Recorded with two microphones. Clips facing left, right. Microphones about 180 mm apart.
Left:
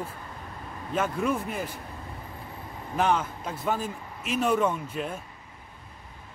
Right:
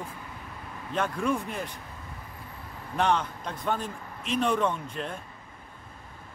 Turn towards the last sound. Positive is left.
turn(degrees=5)  # may be behind; listen again after turning